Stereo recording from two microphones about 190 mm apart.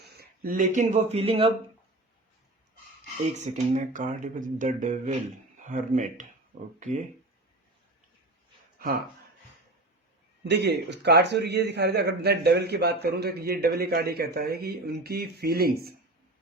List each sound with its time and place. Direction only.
0.0 s speech: 55° right (ahead or behind); by 1.5 s 30° right (ahead or behind)
3.3 s speech: 40° right (ahead or behind)
10.4 s a man's voice: 60° right (ahead or behind)